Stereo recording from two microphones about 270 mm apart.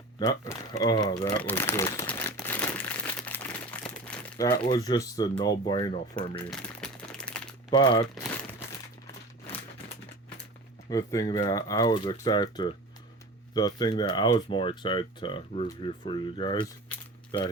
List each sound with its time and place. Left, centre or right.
0.2 s crumpling: centre
4.7 s speech: centre
6.4 s crumpling: centre
7.7 s speech: centre
8.0 s crumpling: centre
10.8 s speech: centre